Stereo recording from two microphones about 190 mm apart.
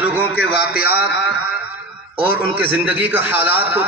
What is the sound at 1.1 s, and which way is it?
Music, 65° left (ahead or behind).